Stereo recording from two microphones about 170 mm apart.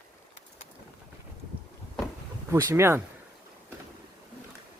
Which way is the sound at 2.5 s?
15° right (ahead or behind).